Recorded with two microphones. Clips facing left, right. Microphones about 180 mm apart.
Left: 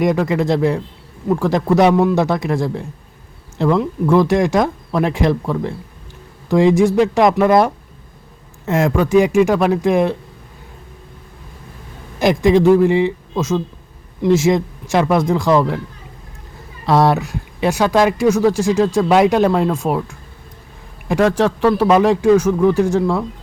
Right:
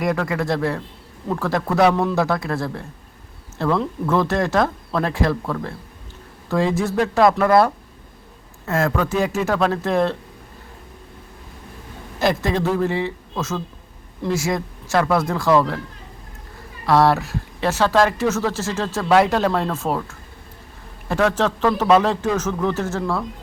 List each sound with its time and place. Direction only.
0.0 s speech: 20° left (ahead or behind)
12.2 s speech: 15° left (ahead or behind)
16.8 s speech: 20° left (ahead or behind)